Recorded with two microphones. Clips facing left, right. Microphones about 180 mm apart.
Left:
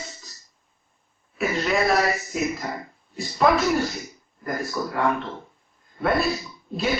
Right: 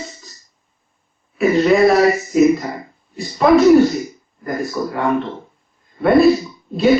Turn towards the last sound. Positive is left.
turn(degrees=0)  # may be behind; listen again after turning